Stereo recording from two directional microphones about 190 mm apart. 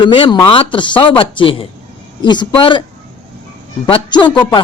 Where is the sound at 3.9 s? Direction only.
25° left (ahead or behind).